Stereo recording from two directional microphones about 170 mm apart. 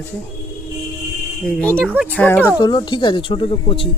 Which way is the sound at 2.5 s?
25° left (ahead or behind).